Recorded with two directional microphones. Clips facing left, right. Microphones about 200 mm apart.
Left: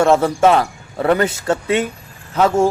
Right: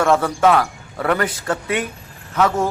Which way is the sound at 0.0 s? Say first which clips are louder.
Left 3 dB; 25° left (ahead or behind).